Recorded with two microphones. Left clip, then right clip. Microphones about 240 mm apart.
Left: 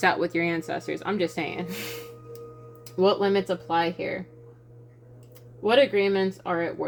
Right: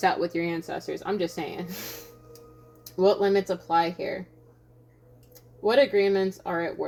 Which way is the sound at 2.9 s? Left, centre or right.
Left.